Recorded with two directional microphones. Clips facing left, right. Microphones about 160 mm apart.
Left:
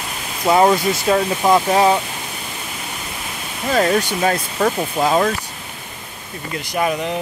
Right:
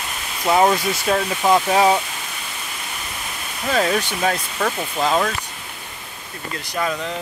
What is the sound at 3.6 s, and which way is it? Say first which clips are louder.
Speech: left 3 dB; 5° left (ahead or behind).